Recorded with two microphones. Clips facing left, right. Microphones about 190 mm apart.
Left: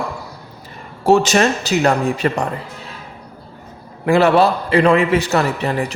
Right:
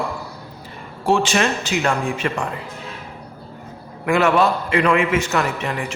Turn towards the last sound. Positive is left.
turn(degrees=35)  # may be behind; listen again after turning